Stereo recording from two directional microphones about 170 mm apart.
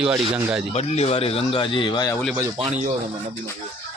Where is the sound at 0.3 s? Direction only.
10° right (ahead or behind).